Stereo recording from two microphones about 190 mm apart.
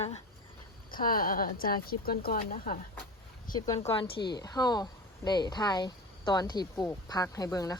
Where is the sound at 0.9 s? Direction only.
50° left (ahead or behind).